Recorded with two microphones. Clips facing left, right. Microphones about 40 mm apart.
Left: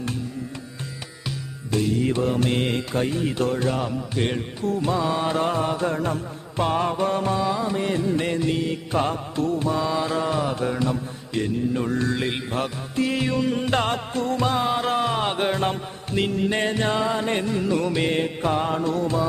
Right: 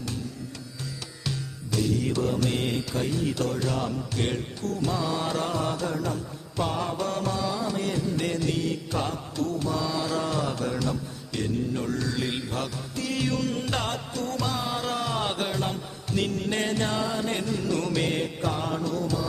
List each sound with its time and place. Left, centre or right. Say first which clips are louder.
1.7 s mantra: left 4 dB; left